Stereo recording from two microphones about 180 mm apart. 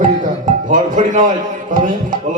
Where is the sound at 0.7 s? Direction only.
45° right (ahead or behind).